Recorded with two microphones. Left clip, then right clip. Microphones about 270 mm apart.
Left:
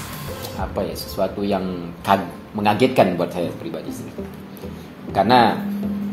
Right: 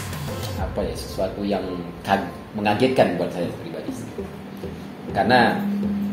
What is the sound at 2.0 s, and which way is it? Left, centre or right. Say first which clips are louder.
Speech: left 4 dB; left.